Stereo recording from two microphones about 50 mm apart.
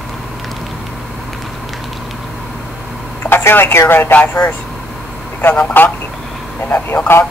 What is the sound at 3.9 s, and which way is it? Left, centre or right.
Speech, left.